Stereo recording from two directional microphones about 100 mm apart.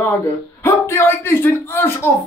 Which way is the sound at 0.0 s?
25° left (ahead or behind).